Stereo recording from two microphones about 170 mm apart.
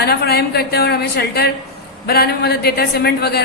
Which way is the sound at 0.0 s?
70° left (ahead or behind).